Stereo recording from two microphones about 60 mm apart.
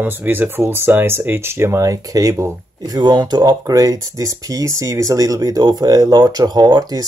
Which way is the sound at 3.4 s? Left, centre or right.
Right.